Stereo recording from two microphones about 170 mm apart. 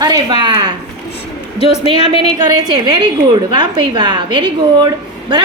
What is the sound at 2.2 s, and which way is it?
A woman's voice, 25° right (ahead or behind).